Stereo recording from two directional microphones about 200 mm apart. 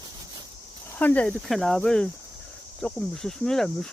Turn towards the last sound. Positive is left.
turn(degrees=0)  # may be behind; listen again after turning